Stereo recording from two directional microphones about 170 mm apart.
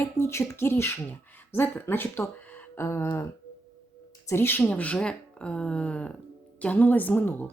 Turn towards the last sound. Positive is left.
turn(degrees=10)  # may be behind; listen again after turning